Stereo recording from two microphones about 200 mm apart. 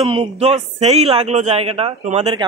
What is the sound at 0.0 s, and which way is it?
A man's voice, 30° right (ahead or behind).